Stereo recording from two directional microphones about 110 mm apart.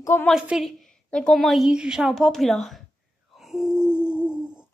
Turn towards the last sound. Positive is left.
turn(degrees=20)  # may be behind; listen again after turning